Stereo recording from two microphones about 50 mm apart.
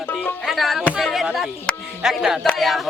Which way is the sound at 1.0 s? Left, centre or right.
Centre.